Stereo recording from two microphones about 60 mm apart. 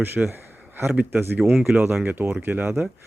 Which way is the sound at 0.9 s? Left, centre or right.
Right.